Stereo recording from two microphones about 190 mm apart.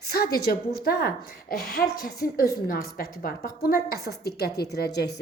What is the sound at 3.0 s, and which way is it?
A woman's voice, 50° left (ahead or behind).